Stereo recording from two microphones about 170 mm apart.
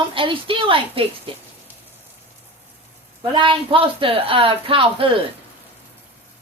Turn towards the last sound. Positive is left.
turn(degrees=-30)  # may be behind; listen again after turning